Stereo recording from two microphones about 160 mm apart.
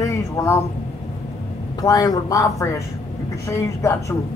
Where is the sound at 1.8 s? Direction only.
25° left (ahead or behind).